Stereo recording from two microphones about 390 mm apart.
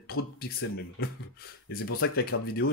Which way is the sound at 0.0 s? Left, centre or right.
Left.